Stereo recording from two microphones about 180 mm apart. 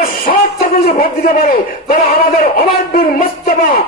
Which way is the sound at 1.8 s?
55° left (ahead or behind).